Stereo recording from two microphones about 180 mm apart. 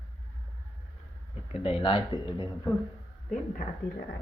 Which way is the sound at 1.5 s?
30° left (ahead or behind).